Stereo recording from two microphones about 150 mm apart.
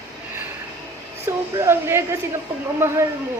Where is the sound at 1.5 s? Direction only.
15° right (ahead or behind).